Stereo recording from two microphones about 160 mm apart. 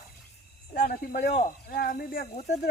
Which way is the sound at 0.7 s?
65° left (ahead or behind).